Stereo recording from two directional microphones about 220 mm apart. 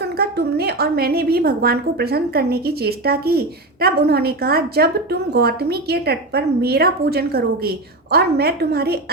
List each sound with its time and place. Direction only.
0.0 s a woman's voice: 45° right (ahead or behind)